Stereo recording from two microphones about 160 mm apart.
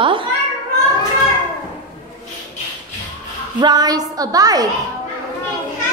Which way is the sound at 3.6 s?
25° right (ahead or behind).